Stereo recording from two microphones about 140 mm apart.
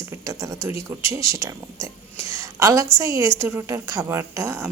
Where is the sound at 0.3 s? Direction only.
20° right (ahead or behind).